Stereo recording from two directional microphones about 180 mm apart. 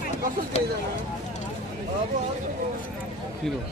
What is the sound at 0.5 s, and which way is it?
Speech, 35° left (ahead or behind).